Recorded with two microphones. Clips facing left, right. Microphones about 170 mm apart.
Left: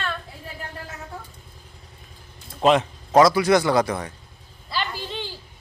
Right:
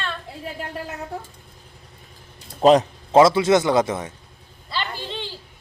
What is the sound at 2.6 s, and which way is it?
Speech, 40° right (ahead or behind).